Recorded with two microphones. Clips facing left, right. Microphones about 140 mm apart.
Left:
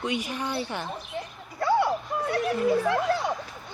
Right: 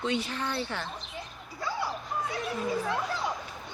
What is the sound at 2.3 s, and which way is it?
Speech, 65° left (ahead or behind).